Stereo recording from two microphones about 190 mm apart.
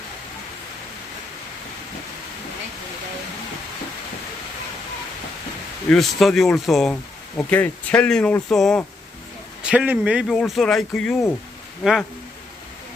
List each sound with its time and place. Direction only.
5.9 s speech: centre (ahead or behind)
9.6 s speech: 10° right (ahead or behind)